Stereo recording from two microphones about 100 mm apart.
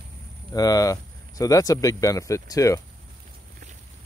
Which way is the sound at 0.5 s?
40° left (ahead or behind).